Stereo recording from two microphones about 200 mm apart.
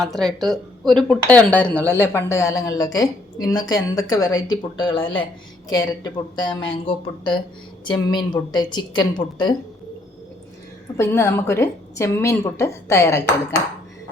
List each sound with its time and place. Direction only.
0.0 s speech: centre (ahead or behind); by 9.6 s 20° left (ahead or behind)
10.9 s speech: 15° left (ahead or behind)